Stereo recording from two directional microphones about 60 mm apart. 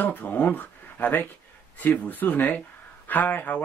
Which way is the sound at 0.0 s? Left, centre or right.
Left.